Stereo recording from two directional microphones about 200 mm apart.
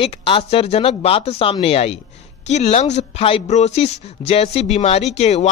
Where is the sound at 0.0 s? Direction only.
25° left (ahead or behind).